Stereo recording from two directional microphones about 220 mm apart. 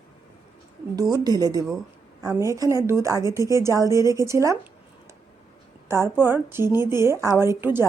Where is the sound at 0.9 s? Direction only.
15° right (ahead or behind).